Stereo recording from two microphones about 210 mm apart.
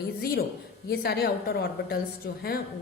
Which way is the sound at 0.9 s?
50° left (ahead or behind).